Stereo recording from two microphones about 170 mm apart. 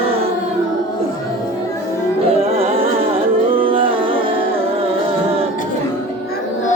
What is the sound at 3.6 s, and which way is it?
Music, 30° right (ahead or behind).